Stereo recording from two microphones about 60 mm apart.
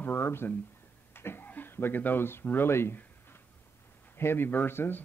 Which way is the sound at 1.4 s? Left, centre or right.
Left.